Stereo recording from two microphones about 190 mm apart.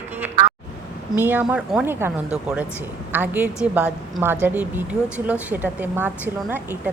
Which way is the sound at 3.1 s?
10° right (ahead or behind).